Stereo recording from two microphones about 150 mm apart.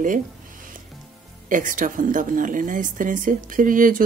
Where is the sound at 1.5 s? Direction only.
60° right (ahead or behind).